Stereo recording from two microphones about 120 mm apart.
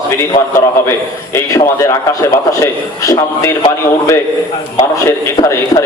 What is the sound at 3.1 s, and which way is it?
A man's voice, 25° left (ahead or behind).